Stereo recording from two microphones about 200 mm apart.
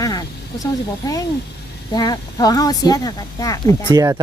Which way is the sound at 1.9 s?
20° left (ahead or behind).